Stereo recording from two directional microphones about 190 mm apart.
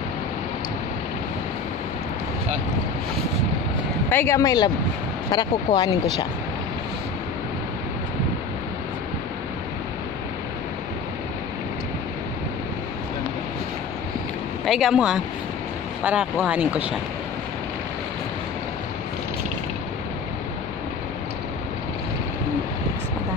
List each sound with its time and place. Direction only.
4.1 s speech: 15° left (ahead or behind)
14.6 s speech: centre (ahead or behind)